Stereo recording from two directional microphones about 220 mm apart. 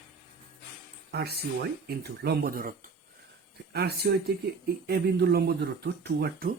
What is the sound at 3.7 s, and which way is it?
Speech, 45° right (ahead or behind).